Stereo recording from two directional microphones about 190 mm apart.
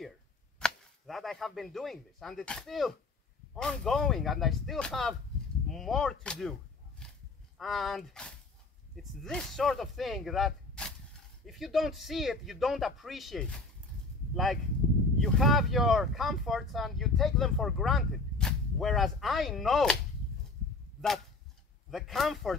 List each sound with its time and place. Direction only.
0.6 s speech: centre (ahead or behind)
7.5 s speech: centre (ahead or behind)
21.9 s speech: centre (ahead or behind)